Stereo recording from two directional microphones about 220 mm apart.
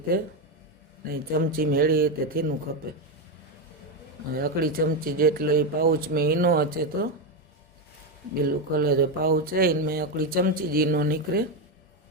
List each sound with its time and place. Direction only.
0.1 s speech: 40° right (ahead or behind)
4.4 s speech: 40° right (ahead or behind)
8.7 s speech: 45° right (ahead or behind)